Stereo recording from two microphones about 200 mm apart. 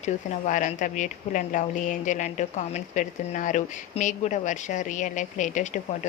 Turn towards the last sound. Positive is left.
turn(degrees=40)  # may be behind; listen again after turning